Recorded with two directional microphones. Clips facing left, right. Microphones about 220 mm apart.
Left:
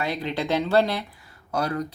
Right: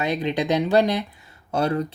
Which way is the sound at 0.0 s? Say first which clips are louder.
Right 4 dB; 20° right (ahead or behind).